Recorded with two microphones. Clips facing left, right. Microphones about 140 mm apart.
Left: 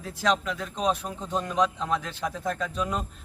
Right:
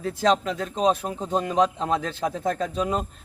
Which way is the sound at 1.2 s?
45° right (ahead or behind).